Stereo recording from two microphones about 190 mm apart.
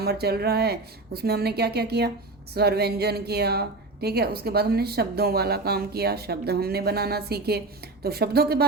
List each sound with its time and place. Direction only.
0.0 s a woman's voice: 55° right (ahead or behind)